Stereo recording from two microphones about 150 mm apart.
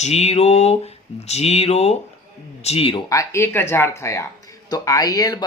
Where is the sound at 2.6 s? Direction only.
40° left (ahead or behind).